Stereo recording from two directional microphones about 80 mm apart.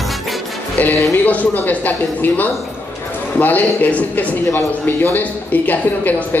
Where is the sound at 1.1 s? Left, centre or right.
Centre.